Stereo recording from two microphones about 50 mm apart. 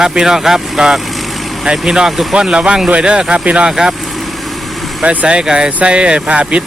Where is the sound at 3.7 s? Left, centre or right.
Centre.